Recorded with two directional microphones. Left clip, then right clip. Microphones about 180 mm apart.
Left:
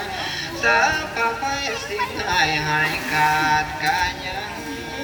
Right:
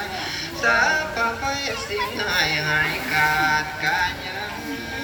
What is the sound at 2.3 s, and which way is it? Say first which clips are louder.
Music: left 2 dB; 20° right (ahead or behind).